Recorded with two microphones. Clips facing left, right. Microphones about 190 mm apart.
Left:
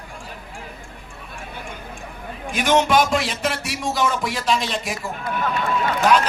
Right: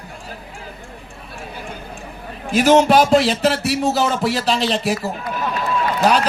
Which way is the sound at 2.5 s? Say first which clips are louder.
Right 5 dB; 35° right (ahead or behind).